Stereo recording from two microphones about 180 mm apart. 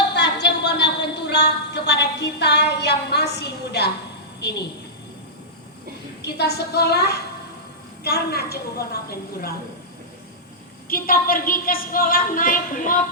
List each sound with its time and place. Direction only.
0.1 s a sound: 70° left (ahead or behind)
4.4 s a woman's voice: 70° left (ahead or behind)
6.2 s a woman's voice: 65° left (ahead or behind)
10.8 s a woman's voice: 55° left (ahead or behind)